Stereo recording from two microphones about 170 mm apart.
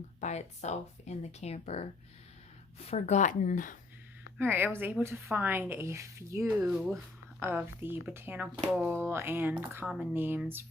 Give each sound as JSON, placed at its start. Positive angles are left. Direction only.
{"t": 0.2, "sound": "speech", "side_deg": 40}
{"t": 4.4, "sound": "speech", "side_deg": -10}
{"t": 6.6, "sound": "speech", "side_deg": -5}
{"t": 9.8, "sound": "speech", "side_deg": 0}
{"t": 10.2, "sound": "speech", "side_deg": -10}